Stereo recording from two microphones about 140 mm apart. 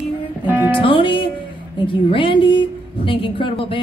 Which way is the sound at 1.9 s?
35° left (ahead or behind).